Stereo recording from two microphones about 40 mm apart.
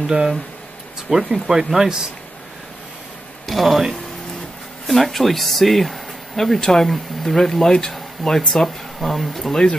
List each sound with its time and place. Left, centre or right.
0.0 s speech: centre
3.4 s speech: centre